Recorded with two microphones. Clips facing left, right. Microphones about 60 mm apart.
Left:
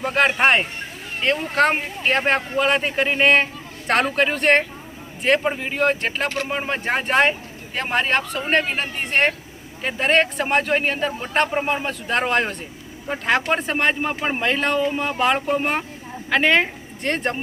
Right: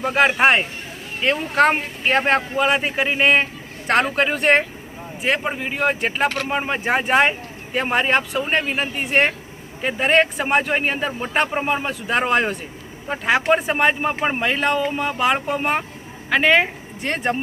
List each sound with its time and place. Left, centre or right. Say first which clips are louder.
0.0 s speech: right 2 dB; centre
6.2 s speech: right 5 dB; right
6.5 s speech: right 2 dB; centre